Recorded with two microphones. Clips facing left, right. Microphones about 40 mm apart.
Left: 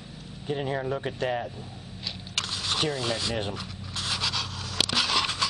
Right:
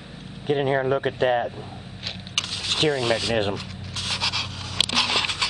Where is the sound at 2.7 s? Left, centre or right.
Right.